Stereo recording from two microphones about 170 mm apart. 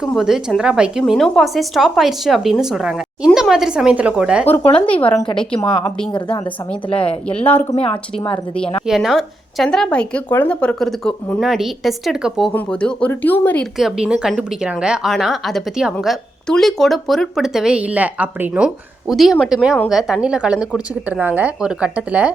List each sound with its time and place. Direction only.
0.1 s a woman's voice: centre (ahead or behind)
4.7 s speech: 30° left (ahead or behind)
7.4 s speech: 10° left (ahead or behind)
8.9 s a woman's voice: centre (ahead or behind)
13.7 s a woman's voice: 5° right (ahead or behind)